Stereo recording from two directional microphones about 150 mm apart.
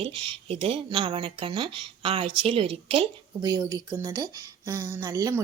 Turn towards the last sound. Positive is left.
turn(degrees=-20)  # may be behind; listen again after turning